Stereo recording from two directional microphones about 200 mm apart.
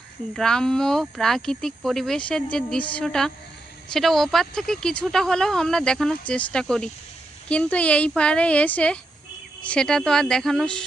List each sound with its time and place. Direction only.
0.3 s speech: 5° left (ahead or behind)